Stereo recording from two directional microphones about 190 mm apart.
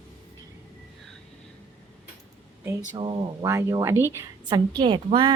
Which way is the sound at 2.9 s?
25° right (ahead or behind).